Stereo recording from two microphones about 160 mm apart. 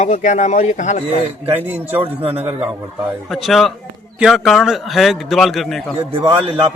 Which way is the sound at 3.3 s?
Centre (ahead or behind).